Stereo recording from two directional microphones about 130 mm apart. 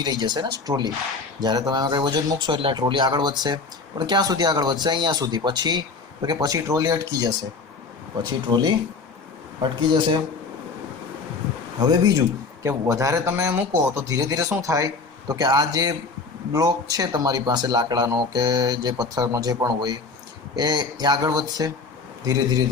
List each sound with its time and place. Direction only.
0.0 s speech: 35° right (ahead or behind)
9.9 s speech: 40° right (ahead or behind)
11.8 s speech: 30° right (ahead or behind)